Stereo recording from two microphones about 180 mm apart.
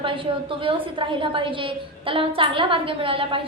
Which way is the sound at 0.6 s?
30° right (ahead or behind).